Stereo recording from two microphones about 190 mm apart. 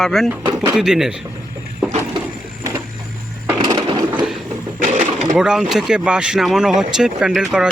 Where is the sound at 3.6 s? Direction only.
20° right (ahead or behind).